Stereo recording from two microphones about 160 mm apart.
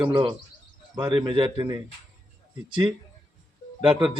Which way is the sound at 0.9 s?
30° right (ahead or behind).